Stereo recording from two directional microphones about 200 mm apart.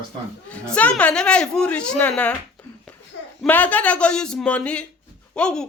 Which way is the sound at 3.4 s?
10° left (ahead or behind).